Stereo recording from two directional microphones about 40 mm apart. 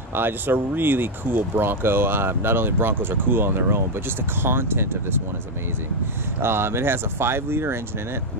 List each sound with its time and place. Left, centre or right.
0.1 s speech: right
6.4 s speech: right